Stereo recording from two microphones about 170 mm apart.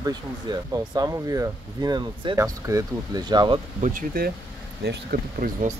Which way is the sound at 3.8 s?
55° right (ahead or behind).